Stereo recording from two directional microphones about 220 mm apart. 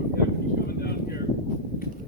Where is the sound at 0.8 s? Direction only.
45° left (ahead or behind).